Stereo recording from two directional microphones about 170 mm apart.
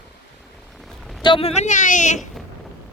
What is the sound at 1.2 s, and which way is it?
A man's voice, 30° left (ahead or behind).